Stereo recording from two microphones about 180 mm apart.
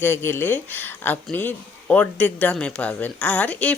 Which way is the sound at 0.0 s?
10° left (ahead or behind).